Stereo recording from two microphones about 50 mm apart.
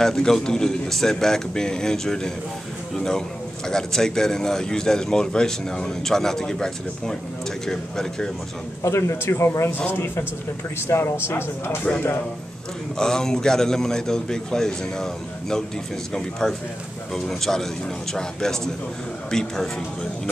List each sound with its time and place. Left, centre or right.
0.0 s a man's voice: centre
8.8 s a man's voice: left
9.2 s speech: left
9.8 s speech: left
12.9 s a man's voice: centre
16.1 s a man's voice: centre